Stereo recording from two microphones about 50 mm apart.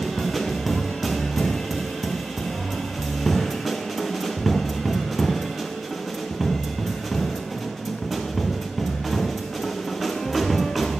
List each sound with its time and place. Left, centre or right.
0.0 s music: centre
3.3 s music: centre
10.0 s music: centre